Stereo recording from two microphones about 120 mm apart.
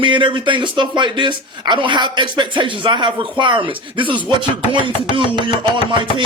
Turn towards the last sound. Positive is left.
turn(degrees=-40)  # may be behind; listen again after turning